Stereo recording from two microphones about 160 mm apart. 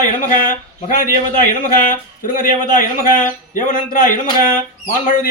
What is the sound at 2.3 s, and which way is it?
A man's voice, 60° left (ahead or behind).